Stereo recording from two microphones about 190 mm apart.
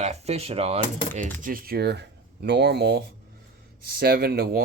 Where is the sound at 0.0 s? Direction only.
35° right (ahead or behind).